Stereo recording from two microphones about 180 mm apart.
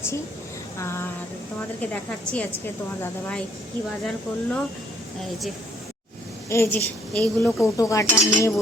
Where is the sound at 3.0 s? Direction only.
5° left (ahead or behind).